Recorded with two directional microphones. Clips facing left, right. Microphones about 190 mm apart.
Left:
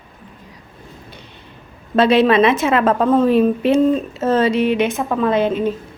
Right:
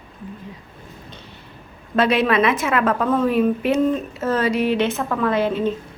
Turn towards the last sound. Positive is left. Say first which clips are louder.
# left 3 dB
turn(degrees=20)  # may be behind; listen again after turning